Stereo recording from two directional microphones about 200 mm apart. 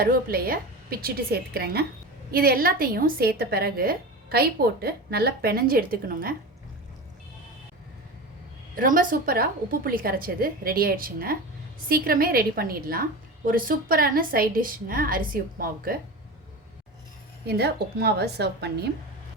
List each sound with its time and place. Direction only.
0.0 s a woman's voice: 50° right (ahead or behind)
8.7 s a woman's voice: 45° right (ahead or behind)
17.4 s a woman's voice: 55° right (ahead or behind)